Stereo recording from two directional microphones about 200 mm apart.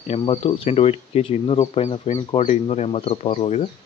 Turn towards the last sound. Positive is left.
turn(degrees=30)  # may be behind; listen again after turning